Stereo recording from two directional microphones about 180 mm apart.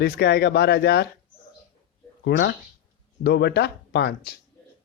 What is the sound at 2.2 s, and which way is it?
Speech, 70° left (ahead or behind).